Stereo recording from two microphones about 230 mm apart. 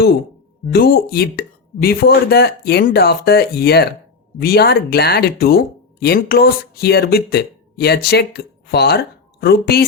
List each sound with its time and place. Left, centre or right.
0.7 s speech: left